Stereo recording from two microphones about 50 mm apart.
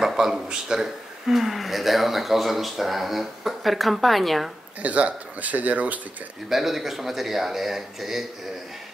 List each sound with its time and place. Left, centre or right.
0.0 s speech: centre
4.8 s speech: right
6.5 s speech: centre